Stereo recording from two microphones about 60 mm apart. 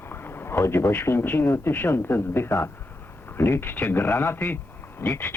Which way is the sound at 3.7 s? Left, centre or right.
Left.